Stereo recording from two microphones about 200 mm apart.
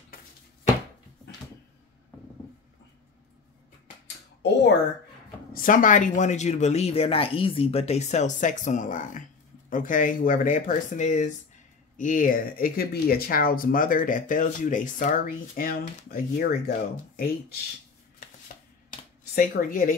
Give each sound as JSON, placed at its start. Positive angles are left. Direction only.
{"t": 5.5, "sound": "speech", "side_deg": 45}
{"t": 19.3, "sound": "speech", "side_deg": 45}